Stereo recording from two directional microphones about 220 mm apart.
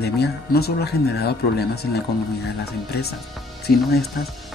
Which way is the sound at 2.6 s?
45° left (ahead or behind).